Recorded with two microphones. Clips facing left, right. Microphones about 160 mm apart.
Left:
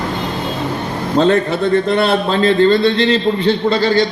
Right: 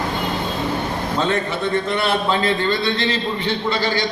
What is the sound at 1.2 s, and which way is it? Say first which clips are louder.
A man's voice: left 9 dB; 35° left (ahead or behind).